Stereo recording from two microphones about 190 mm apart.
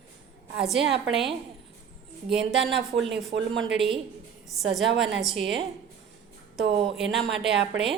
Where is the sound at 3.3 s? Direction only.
80° right.